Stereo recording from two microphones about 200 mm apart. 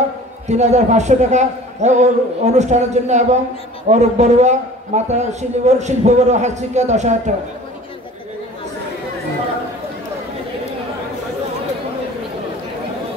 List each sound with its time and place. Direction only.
0.5 s a man's voice: 35° right (ahead or behind)